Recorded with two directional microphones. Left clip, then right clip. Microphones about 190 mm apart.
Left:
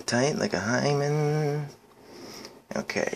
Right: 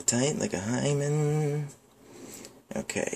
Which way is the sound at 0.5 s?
20° right (ahead or behind).